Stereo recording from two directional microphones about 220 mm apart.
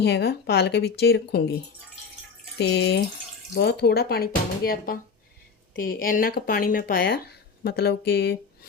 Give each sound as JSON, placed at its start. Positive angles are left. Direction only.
{"t": 0.0, "sound": "speech", "side_deg": 50}
{"t": 2.6, "sound": "speech", "side_deg": 50}